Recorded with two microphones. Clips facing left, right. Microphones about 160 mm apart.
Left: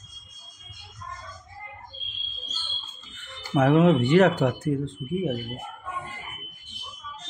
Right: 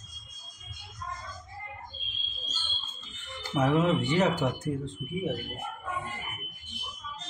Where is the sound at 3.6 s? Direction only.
60° left (ahead or behind).